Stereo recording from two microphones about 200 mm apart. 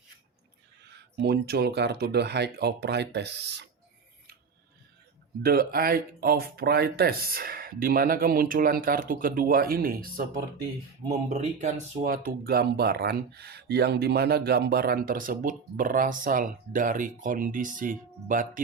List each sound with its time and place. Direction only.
1.2 s speech: 55° right (ahead or behind)
5.4 s speech: 50° right (ahead or behind)
11.3 s speech: 35° right (ahead or behind)